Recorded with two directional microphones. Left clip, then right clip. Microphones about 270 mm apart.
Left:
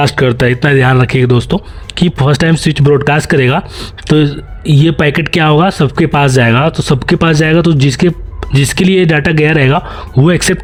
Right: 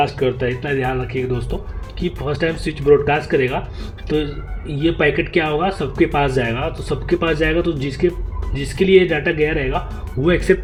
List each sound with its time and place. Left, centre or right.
0.2 s speech: left